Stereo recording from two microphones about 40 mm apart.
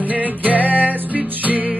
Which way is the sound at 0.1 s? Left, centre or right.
Right.